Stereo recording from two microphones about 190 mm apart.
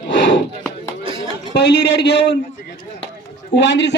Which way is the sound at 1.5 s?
60° left (ahead or behind).